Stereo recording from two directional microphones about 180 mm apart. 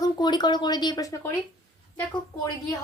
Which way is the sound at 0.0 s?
25° left (ahead or behind).